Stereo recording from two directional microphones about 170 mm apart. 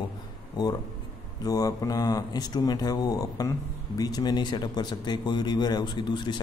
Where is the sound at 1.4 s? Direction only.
20° left (ahead or behind).